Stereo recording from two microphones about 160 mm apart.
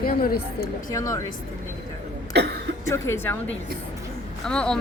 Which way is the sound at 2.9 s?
15° left (ahead or behind).